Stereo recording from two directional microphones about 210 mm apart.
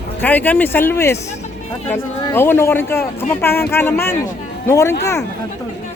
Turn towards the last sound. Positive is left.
turn(degrees=15)  # may be behind; listen again after turning